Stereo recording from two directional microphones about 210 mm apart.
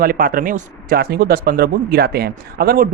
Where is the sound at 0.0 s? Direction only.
40° right (ahead or behind).